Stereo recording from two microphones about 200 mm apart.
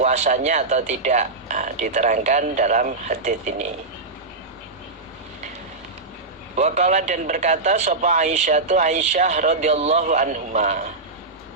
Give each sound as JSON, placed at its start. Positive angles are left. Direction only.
{"t": 0.0, "sound": "speech", "side_deg": -35}
{"t": 6.6, "sound": "speech", "side_deg": -35}